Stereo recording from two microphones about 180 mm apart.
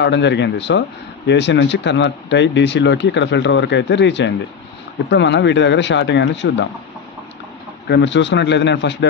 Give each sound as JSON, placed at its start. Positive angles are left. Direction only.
{"t": 0.0, "sound": "speech", "side_deg": 75}
{"t": 7.9, "sound": "speech", "side_deg": 85}